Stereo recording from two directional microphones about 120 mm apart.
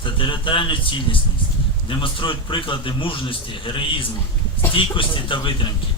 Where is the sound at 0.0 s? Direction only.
45° left (ahead or behind).